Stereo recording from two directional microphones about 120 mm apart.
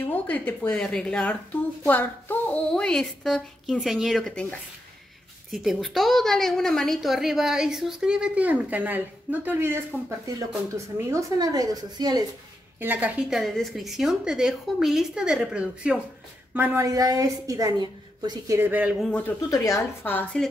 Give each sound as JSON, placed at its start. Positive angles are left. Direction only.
{"t": 0.0, "sound": "a woman's voice", "side_deg": 15}
{"t": 12.8, "sound": "a woman's voice", "side_deg": -15}
{"t": 13.3, "sound": "a woman's voice", "side_deg": 0}
{"t": 16.5, "sound": "a woman's voice", "side_deg": -20}
{"t": 18.6, "sound": "a woman's voice", "side_deg": -15}
{"t": 18.9, "sound": "a woman's voice", "side_deg": 5}
{"t": 19.5, "sound": "a woman's voice", "side_deg": 25}
{"t": 20.4, "sound": "a woman's voice", "side_deg": 5}